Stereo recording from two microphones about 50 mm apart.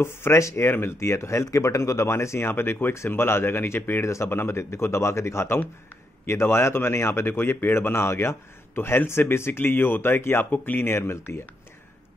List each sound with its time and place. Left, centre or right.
0.0 s a man's voice: left
0.4 s speech: left
0.7 s speech: left
2.4 s a man's voice: left
4.0 s speech: left
4.3 s a man's voice: left
7.2 s a man's voice: left
10.8 s a man's voice: left